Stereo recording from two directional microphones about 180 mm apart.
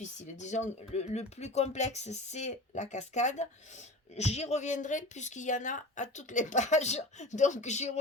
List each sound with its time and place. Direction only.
0.0 s speech: 40° left (ahead or behind)